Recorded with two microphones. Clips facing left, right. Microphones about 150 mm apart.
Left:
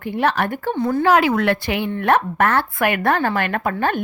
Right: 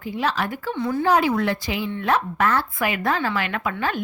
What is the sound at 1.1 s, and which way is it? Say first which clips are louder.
A woman's voice: left 3 dB; 80° left.